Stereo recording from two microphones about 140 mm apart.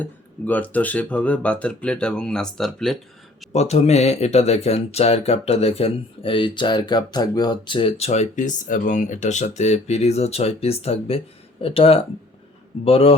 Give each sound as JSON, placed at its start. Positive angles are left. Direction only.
{"t": 0.0, "sound": "speech", "side_deg": 10}
{"t": 3.5, "sound": "speech", "side_deg": 50}